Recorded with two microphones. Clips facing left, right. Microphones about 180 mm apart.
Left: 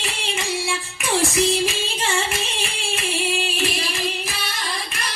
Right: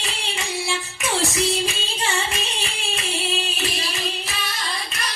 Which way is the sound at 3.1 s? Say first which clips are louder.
Left 2 dB; 15° left (ahead or behind).